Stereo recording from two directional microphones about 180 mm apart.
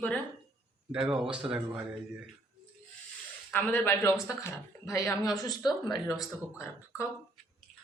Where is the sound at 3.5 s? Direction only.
10° left (ahead or behind).